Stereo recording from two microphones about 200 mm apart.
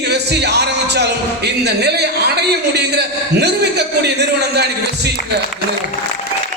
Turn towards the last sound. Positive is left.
turn(degrees=-55)  # may be behind; listen again after turning